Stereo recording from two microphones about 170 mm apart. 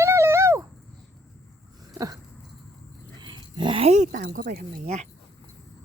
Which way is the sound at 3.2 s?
25° right (ahead or behind).